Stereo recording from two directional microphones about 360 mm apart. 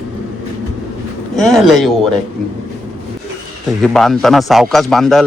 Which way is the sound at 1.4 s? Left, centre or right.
Centre.